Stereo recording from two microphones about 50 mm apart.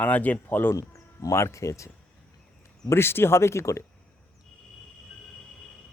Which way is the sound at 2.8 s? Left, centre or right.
Left.